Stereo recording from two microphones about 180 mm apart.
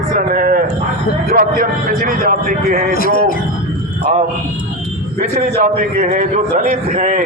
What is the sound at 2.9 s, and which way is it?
Speech, 55° left (ahead or behind).